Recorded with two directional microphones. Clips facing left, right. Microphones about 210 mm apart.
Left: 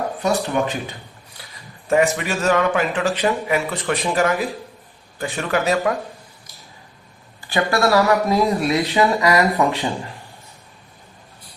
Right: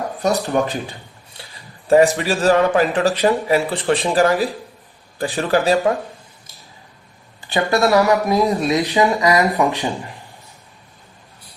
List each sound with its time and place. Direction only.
0.2 s speech: 40° right (ahead or behind)
1.4 s a sound: 30° right (ahead or behind)
1.9 s speech: 35° right (ahead or behind)
7.4 s speech: 20° right (ahead or behind)